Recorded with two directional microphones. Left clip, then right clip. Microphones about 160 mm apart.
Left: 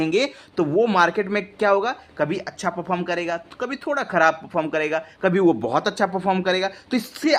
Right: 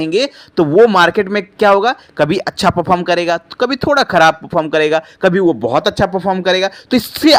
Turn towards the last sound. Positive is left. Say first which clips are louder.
# right 11 dB
turn(degrees=-40)  # may be behind; listen again after turning